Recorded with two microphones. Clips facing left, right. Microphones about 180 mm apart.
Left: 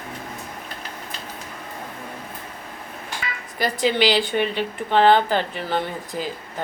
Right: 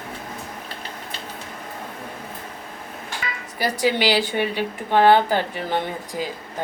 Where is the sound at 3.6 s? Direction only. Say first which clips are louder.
Left 1 dB; 10° right (ahead or behind).